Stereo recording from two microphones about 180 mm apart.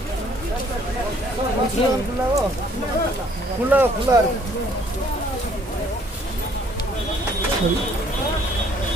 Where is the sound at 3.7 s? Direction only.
10° right (ahead or behind).